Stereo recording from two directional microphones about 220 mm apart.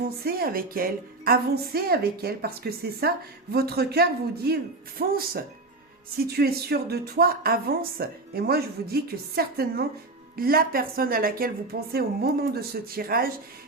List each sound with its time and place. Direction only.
0.0 s speech: 45° right (ahead or behind)